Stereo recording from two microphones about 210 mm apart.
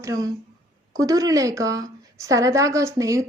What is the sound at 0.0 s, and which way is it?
Speech, 15° right (ahead or behind).